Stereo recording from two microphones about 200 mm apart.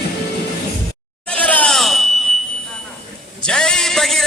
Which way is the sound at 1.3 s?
5° left (ahead or behind).